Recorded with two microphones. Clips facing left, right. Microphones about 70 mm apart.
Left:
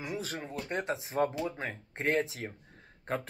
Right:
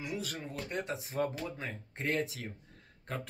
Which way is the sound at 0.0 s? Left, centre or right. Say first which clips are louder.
Left 2 dB; left.